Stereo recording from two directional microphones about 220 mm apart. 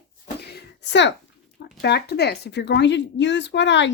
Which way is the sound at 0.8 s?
55° left (ahead or behind).